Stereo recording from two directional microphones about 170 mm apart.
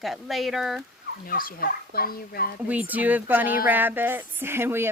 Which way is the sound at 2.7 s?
10° right (ahead or behind).